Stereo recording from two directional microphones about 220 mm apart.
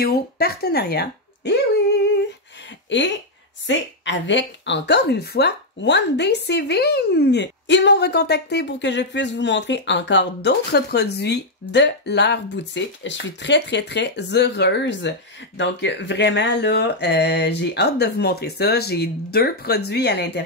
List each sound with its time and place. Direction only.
0.0 s speech: 45° left (ahead or behind)
2.9 s a woman's voice: 55° left (ahead or behind)